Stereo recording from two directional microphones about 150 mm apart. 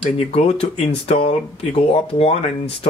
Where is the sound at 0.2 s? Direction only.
45° left (ahead or behind).